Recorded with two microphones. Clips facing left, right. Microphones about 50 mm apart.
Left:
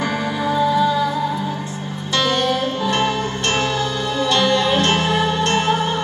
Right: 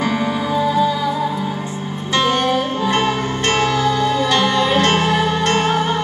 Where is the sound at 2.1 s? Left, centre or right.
Right.